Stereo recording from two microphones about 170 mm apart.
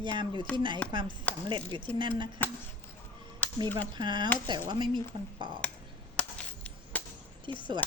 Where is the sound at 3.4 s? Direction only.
10° left (ahead or behind).